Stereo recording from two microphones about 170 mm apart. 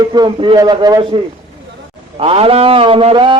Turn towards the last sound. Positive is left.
turn(degrees=-30)  # may be behind; listen again after turning